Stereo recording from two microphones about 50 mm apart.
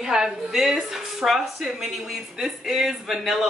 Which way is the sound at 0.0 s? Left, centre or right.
Centre.